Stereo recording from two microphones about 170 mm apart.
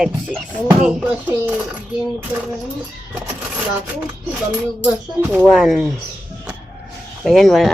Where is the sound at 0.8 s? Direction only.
5° right (ahead or behind).